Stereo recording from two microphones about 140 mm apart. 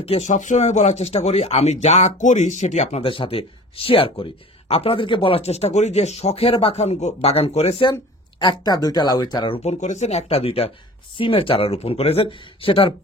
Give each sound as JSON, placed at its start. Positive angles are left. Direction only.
{"t": 0.0, "sound": "speech", "side_deg": 50}
{"t": 8.4, "sound": "speech", "side_deg": 30}
{"t": 9.6, "sound": "speech", "side_deg": 55}